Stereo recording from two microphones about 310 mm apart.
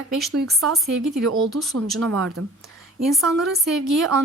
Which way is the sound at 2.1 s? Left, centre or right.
Right.